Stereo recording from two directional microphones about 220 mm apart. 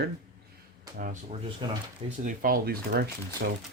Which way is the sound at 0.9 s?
35° right (ahead or behind).